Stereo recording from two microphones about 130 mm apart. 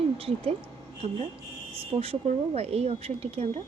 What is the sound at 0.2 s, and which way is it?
Speech, 45° right (ahead or behind).